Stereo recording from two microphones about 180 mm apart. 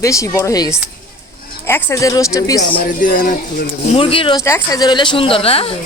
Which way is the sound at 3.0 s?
50° left (ahead or behind).